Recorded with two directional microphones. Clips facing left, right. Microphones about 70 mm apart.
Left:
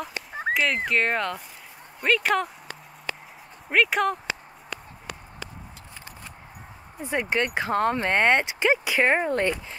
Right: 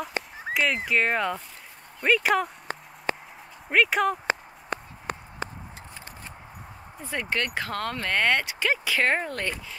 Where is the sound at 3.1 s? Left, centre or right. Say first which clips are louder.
Right 5 dB; right.